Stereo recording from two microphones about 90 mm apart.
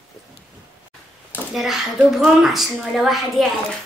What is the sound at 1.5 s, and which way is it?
A woman's voice, centre (ahead or behind).